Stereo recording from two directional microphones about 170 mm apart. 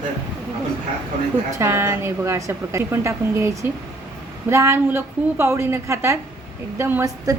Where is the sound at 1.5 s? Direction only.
15° right (ahead or behind).